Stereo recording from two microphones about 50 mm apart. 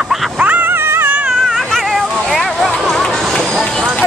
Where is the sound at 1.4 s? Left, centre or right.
Centre.